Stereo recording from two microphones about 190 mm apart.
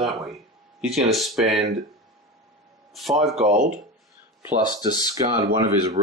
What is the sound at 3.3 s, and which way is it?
Speech, 40° right (ahead or behind).